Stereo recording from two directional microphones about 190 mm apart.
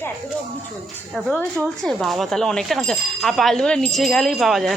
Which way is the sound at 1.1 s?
Centre (ahead or behind).